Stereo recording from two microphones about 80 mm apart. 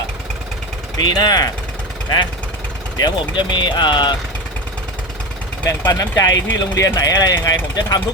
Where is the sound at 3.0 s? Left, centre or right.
Left.